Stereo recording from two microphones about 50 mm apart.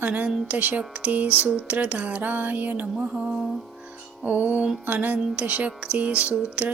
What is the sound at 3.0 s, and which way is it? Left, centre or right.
Speech, right.